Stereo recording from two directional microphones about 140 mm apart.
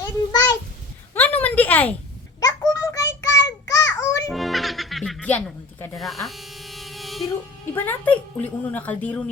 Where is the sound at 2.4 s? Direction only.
25° left (ahead or behind).